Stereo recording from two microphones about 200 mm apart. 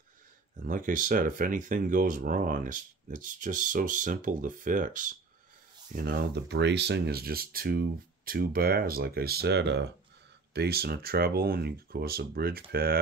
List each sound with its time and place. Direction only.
0.6 s speech: 40° right (ahead or behind)